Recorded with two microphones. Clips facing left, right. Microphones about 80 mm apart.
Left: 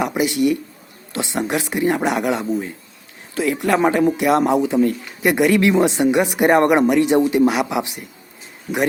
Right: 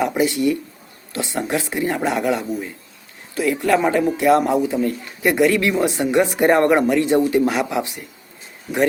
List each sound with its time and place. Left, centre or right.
0.0 s speech: centre